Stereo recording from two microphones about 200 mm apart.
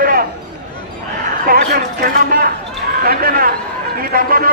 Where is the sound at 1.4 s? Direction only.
45° right (ahead or behind).